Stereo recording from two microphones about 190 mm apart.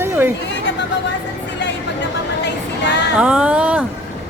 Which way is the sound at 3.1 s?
5° right (ahead or behind).